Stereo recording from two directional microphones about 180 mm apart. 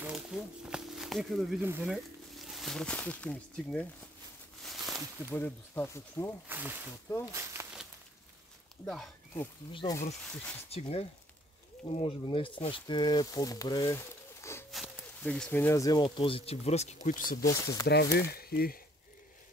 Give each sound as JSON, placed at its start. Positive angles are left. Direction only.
{"t": 0.0, "sound": "a sound", "side_deg": -5}
{"t": 1.6, "sound": "speech", "side_deg": -10}
{"t": 2.3, "sound": "speech", "side_deg": 0}
{"t": 4.6, "sound": "a sound", "side_deg": 0}
{"t": 5.3, "sound": "speech", "side_deg": 10}
{"t": 6.4, "sound": "speech", "side_deg": -10}
{"t": 7.3, "sound": "a sound", "side_deg": -15}
{"t": 8.8, "sound": "speech", "side_deg": 0}
{"t": 9.7, "sound": "speech", "side_deg": 25}
{"t": 14.7, "sound": "speech", "side_deg": 0}
{"t": 17.4, "sound": "speech", "side_deg": 20}
{"t": 17.8, "sound": "speech", "side_deg": 65}